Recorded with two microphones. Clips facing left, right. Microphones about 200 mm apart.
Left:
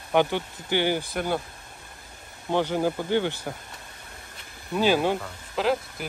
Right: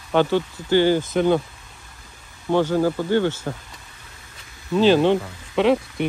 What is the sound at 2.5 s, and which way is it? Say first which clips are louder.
Speech: right 5 dB; 15° left (ahead or behind).